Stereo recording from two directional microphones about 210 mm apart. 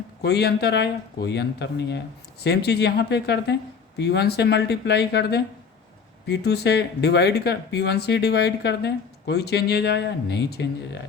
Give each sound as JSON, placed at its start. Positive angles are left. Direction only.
{"t": 0.2, "sound": "speech", "side_deg": 50}